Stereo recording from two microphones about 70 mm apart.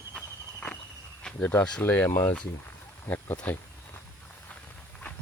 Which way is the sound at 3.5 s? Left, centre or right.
Left.